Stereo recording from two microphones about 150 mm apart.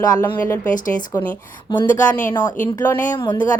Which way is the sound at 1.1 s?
10° left (ahead or behind).